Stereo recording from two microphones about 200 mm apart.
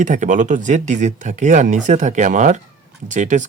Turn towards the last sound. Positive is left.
turn(degrees=-35)  # may be behind; listen again after turning